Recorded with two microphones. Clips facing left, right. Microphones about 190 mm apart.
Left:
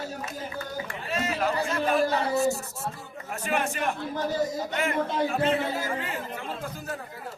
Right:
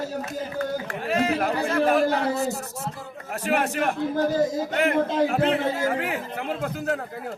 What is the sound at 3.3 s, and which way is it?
Speech, 65° right (ahead or behind).